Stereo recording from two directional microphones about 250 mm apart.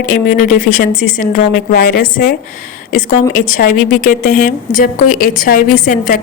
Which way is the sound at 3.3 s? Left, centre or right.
Left.